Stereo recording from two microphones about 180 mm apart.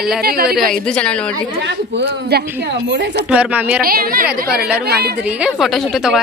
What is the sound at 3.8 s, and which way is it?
Speech, 55° right (ahead or behind).